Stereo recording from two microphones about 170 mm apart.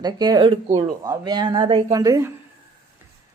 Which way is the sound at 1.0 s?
25° right (ahead or behind).